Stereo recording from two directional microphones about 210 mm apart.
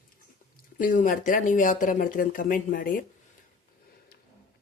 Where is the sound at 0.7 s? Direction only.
40° left (ahead or behind).